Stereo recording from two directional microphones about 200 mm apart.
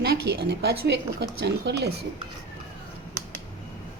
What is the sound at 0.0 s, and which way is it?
A woman's voice, 50° right (ahead or behind).